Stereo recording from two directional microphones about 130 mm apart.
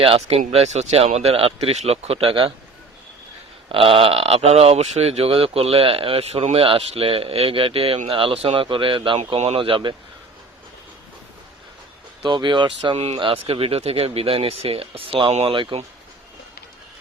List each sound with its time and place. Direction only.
0.0 s speech: 45° right (ahead or behind)
3.7 s speech: 45° right (ahead or behind)
12.2 s speech: 35° right (ahead or behind)
15.5 s speech: 40° right (ahead or behind)